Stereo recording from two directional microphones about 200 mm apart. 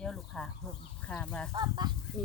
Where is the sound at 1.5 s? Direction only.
20° right (ahead or behind).